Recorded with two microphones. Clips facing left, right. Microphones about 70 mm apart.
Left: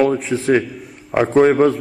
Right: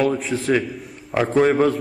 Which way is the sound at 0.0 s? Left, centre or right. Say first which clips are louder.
Left 4 dB; centre.